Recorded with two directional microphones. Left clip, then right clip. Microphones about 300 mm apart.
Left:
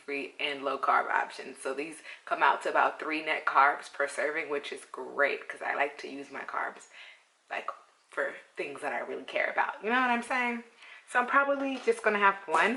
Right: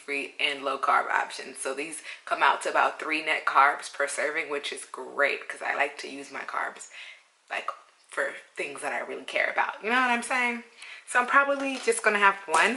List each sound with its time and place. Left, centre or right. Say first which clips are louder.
0.3 s speech: right 4 dB; centre
4.9 s speech: even; centre
5.3 s speech: right 3 dB; centre